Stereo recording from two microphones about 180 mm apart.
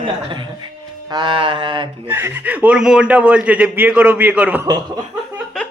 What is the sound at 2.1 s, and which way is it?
A man's voice, 10° right (ahead or behind).